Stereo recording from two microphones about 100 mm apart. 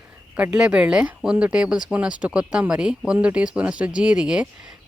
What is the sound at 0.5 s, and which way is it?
A woman's voice, 10° right (ahead or behind).